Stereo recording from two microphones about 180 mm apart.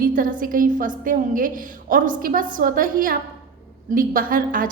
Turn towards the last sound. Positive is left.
turn(degrees=-50)  # may be behind; listen again after turning